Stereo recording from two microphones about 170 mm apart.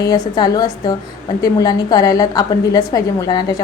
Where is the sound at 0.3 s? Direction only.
20° left (ahead or behind).